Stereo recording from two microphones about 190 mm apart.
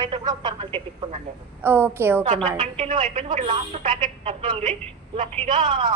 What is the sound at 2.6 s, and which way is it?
Speech, 35° right (ahead or behind).